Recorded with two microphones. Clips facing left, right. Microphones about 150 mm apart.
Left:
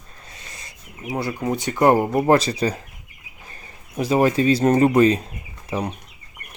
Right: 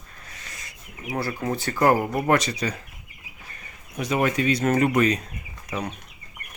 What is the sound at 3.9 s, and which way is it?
Speech, 30° left (ahead or behind).